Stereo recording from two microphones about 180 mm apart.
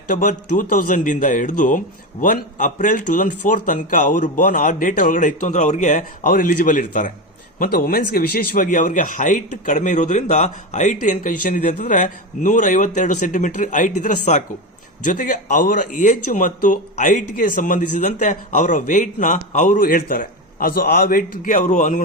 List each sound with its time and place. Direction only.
0.1 s speech: 45° left (ahead or behind)